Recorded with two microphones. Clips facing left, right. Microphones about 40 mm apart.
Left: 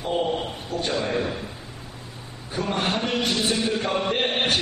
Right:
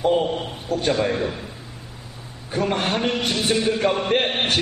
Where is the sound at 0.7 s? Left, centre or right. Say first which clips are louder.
Right 5 dB; right.